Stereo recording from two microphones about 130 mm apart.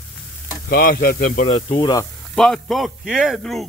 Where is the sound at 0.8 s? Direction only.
90° left.